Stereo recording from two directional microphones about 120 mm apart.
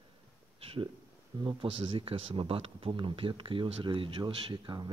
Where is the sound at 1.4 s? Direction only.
40° right (ahead or behind).